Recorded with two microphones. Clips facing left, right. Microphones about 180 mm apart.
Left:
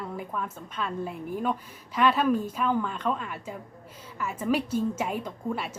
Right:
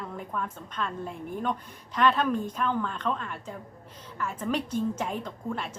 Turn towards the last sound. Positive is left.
turn(degrees=10)  # may be behind; listen again after turning